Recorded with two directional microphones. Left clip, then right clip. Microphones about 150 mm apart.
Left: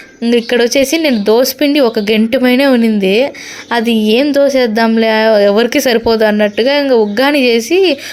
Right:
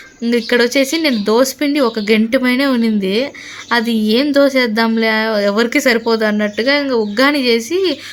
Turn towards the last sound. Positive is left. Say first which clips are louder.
# left 5 dB
turn(degrees=20)  # may be behind; listen again after turning